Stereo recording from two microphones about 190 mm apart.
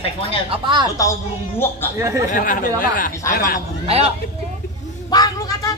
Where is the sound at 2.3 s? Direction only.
45° left (ahead or behind).